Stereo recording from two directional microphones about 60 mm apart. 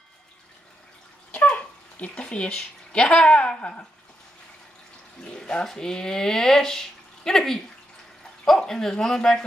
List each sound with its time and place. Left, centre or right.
1.3 s speech: left
5.2 s speech: centre